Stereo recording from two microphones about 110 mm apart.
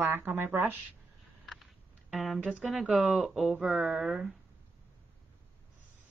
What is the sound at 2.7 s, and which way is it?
Speech, centre (ahead or behind).